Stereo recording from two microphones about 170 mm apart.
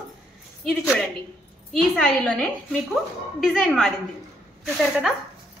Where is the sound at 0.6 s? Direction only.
5° left (ahead or behind).